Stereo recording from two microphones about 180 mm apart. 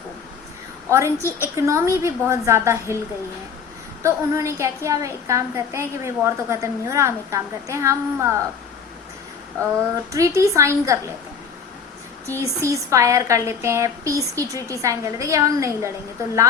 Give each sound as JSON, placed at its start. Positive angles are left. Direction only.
{"t": 0.9, "sound": "a woman's voice", "side_deg": -15}
{"t": 4.0, "sound": "a woman's voice", "side_deg": -15}
{"t": 10.1, "sound": "a woman's voice", "side_deg": -15}
{"t": 12.4, "sound": "a woman's voice", "side_deg": -15}